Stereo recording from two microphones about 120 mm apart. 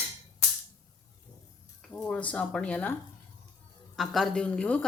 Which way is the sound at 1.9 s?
15° left (ahead or behind).